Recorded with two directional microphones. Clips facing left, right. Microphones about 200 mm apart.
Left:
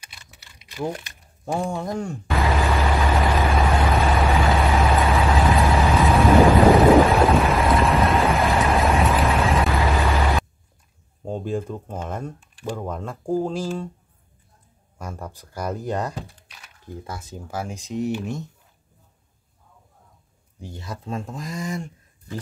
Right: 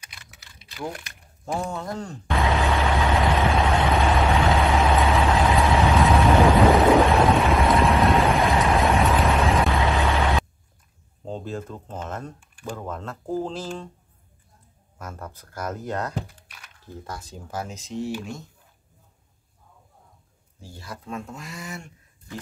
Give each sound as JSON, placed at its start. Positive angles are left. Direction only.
{"t": 0.8, "sound": "vehicle", "side_deg": 20}
{"t": 11.2, "sound": "speech", "side_deg": 10}
{"t": 15.0, "sound": "speech", "side_deg": 10}
{"t": 20.6, "sound": "speech", "side_deg": 20}